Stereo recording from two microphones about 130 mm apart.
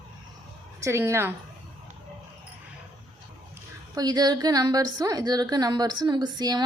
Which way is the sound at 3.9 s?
30° right (ahead or behind).